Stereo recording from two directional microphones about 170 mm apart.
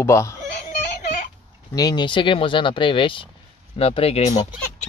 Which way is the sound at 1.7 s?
25° left (ahead or behind).